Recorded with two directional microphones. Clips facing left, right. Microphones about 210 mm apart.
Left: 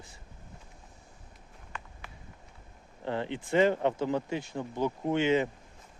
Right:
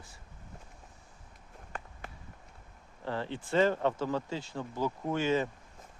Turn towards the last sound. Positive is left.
turn(degrees=20)  # may be behind; listen again after turning